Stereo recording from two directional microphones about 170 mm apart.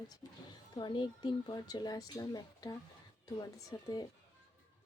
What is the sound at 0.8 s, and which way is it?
A woman's voice, 25° left (ahead or behind).